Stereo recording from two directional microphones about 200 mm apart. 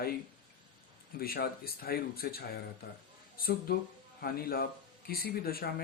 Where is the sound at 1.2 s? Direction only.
50° left (ahead or behind).